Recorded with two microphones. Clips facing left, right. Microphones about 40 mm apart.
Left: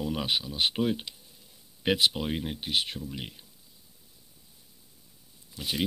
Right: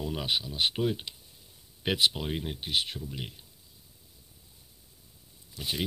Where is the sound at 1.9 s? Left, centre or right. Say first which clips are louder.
Left 2 dB; left.